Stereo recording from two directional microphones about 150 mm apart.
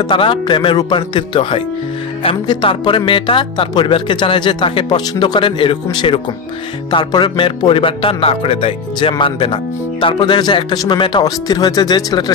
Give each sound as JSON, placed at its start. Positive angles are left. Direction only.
{"t": 0.0, "sound": "speech", "side_deg": 35}